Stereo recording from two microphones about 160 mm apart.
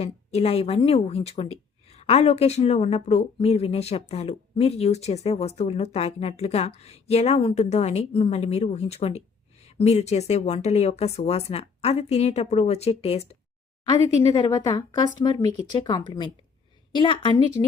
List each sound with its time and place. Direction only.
0.0 s a woman's voice: 40° left (ahead or behind)
14.3 s speech: 25° left (ahead or behind)